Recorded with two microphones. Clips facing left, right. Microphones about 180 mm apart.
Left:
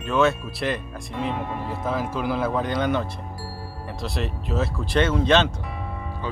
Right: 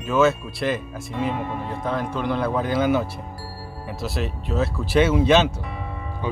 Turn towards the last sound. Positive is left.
turn(degrees=-15)  # may be behind; listen again after turning